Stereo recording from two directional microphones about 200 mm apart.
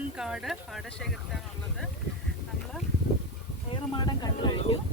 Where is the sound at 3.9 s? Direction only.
20° left (ahead or behind).